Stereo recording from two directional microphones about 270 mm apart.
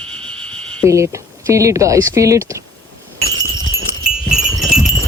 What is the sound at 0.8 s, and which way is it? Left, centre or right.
Speech, centre.